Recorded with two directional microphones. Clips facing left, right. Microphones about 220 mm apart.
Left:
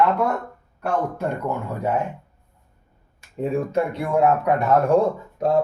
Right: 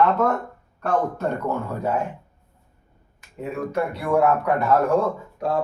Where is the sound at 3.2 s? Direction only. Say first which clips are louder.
Left 5 dB; 25° left (ahead or behind).